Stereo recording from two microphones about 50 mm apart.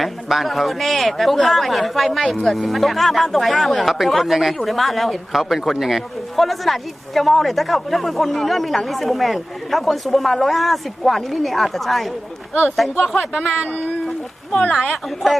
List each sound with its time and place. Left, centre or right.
0.0 s speech: centre
13.6 s speech: right
15.2 s speech: centre